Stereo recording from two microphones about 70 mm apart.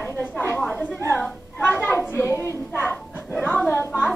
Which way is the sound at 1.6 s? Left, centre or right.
Left.